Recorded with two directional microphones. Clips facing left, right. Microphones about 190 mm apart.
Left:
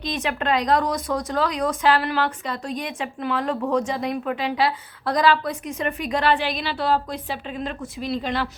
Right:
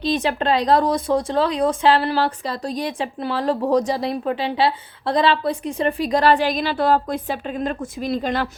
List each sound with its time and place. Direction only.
0.0 s speech: 35° right (ahead or behind)